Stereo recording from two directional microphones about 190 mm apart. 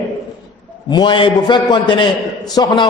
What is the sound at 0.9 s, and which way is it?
A man's voice, 25° left (ahead or behind).